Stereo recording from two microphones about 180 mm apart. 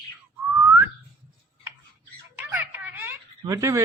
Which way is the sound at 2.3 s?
10° right (ahead or behind).